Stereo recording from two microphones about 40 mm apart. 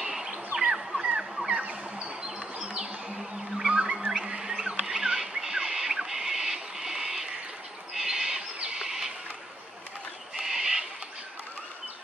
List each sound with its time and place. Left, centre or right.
0.0 s bird: centre
1.5 s a sound: right
2.8 s music: centre
3.6 s a sound: right
7.9 s bird: centre
10.3 s owl: centre